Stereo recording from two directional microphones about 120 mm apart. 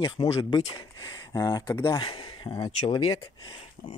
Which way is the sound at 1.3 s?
30° left (ahead or behind).